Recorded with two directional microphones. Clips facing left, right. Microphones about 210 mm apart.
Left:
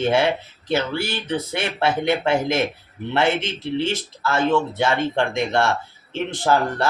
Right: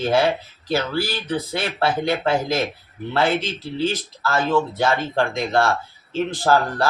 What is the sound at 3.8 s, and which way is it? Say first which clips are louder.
Speech: right 2 dB; 25° left (ahead or behind).